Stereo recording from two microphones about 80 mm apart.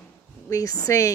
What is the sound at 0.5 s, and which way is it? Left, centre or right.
Speech, left.